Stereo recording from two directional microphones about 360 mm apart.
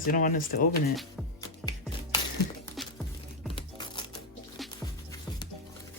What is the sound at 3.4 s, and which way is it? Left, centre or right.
Music, centre.